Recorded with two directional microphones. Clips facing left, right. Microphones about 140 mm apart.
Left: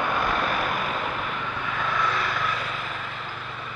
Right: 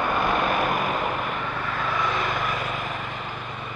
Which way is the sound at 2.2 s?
45° right (ahead or behind).